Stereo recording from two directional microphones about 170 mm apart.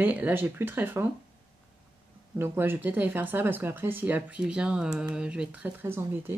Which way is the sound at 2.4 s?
15° right (ahead or behind).